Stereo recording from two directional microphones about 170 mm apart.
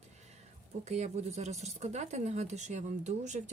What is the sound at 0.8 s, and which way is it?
Speech, 40° right (ahead or behind).